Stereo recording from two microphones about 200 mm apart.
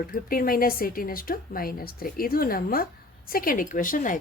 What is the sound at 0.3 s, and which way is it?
Speech, 45° left (ahead or behind).